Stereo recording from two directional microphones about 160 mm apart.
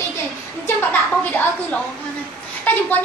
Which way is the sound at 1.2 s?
10° left (ahead or behind).